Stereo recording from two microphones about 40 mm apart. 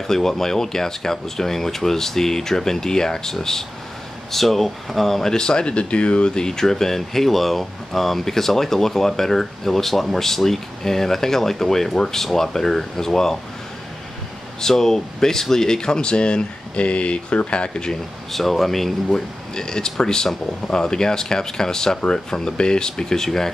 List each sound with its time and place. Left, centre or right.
0.0 s speech: centre
5.3 s speech: centre
14.6 s speech: centre
18.3 s speech: centre